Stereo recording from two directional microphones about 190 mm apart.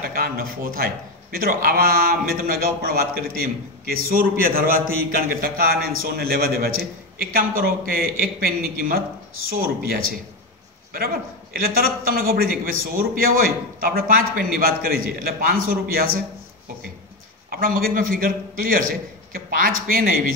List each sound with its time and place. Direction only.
0.0 s a man's voice: 50° right (ahead or behind)
11.5 s a man's voice: 50° right (ahead or behind)
17.5 s a man's voice: 50° right (ahead or behind)